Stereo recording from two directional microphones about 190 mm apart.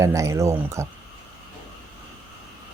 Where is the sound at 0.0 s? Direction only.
15° right (ahead or behind).